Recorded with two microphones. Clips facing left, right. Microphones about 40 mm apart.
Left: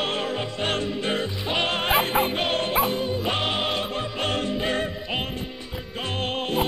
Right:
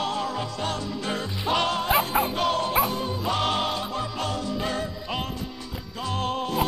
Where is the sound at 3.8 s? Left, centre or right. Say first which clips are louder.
Left 2 dB; left.